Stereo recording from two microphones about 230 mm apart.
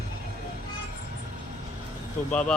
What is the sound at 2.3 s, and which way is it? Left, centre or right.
Speech, centre.